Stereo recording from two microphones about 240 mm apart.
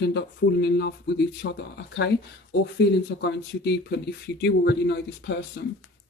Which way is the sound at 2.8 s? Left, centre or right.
Left.